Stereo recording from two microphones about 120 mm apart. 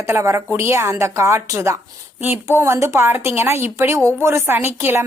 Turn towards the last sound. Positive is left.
turn(degrees=-20)  # may be behind; listen again after turning